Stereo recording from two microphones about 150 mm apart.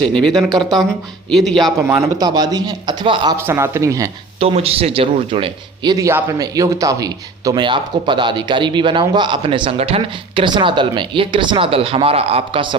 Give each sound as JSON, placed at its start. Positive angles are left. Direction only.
{"t": 0.3, "sound": "speech", "side_deg": -25}
{"t": 1.3, "sound": "a man's voice", "side_deg": 0}
{"t": 1.9, "sound": "speech", "side_deg": -25}
{"t": 3.3, "sound": "speech", "side_deg": -15}
{"t": 4.4, "sound": "speech", "side_deg": -40}